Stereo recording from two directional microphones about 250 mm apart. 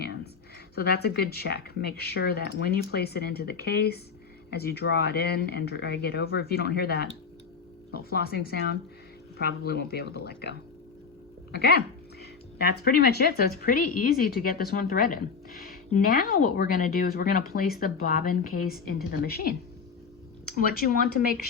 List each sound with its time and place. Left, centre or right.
0.8 s speech: left
11.5 s speech: left
20.6 s speech: left